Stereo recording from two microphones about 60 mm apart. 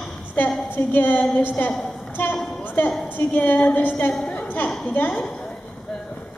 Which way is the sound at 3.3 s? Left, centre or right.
Left.